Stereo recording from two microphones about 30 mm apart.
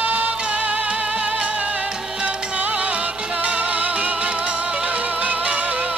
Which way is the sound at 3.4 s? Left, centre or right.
Right.